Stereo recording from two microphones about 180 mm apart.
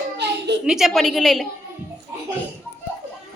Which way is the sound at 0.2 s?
70° right (ahead or behind).